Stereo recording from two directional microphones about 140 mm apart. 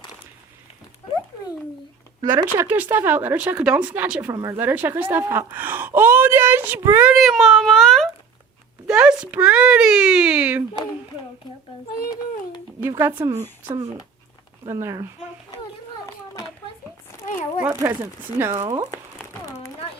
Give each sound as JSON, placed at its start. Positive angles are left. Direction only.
{"t": 2.3, "sound": "speech", "side_deg": -15}
{"t": 7.1, "sound": "speech", "side_deg": 0}
{"t": 8.9, "sound": "speech", "side_deg": -10}
{"t": 12.0, "sound": "a sound", "side_deg": 25}
{"t": 12.9, "sound": "speech", "side_deg": -20}
{"t": 14.7, "sound": "speech", "side_deg": -20}
{"t": 16.0, "sound": "a sound", "side_deg": 20}
{"t": 17.6, "sound": "speech", "side_deg": -15}
{"t": 18.6, "sound": "speech", "side_deg": -30}